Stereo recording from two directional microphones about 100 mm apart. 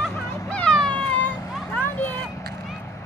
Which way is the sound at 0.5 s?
10° left (ahead or behind).